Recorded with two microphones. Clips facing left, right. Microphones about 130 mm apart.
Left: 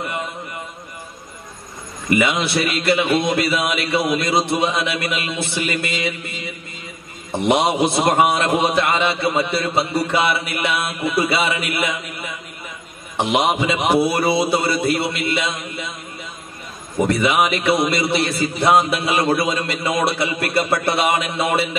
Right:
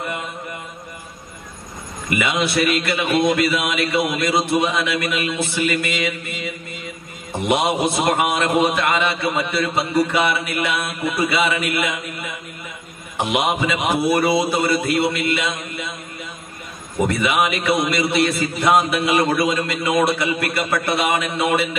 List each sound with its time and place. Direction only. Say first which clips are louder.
2.1 s a man's voice: left 1 dB; 30° left (ahead or behind)
7.4 s a man's voice: left 2 dB; 25° left (ahead or behind)
13.3 s a man's voice: left 2 dB; 30° left (ahead or behind)
17.1 s a man's voice: left 3 dB; 25° left (ahead or behind)